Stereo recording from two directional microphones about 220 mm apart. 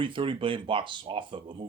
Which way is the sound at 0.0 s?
25° right (ahead or behind).